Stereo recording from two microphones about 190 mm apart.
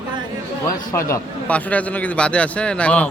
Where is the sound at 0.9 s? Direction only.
15° left (ahead or behind).